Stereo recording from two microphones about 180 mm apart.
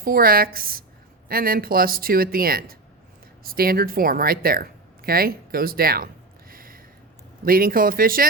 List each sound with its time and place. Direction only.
0.0 s speech: 55° right (ahead or behind)
6.5 s a sound: 55° right (ahead or behind)
7.4 s speech: 55° right (ahead or behind)